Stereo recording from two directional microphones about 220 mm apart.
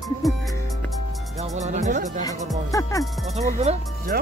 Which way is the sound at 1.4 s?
30° right (ahead or behind).